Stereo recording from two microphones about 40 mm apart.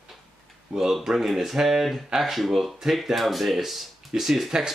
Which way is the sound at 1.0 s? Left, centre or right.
Centre.